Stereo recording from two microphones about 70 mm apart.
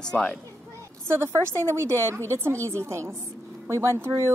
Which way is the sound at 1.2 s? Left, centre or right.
Right.